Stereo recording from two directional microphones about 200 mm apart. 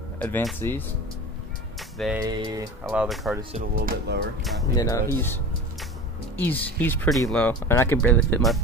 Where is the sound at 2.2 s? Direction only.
20° right (ahead or behind).